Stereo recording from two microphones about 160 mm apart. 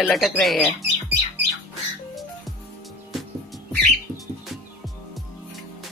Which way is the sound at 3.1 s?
Centre (ahead or behind).